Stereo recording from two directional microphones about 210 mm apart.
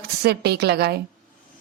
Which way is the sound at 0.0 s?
50° right (ahead or behind).